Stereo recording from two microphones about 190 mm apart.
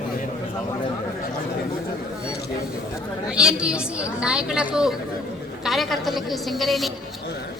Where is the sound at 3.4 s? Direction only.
5° right (ahead or behind).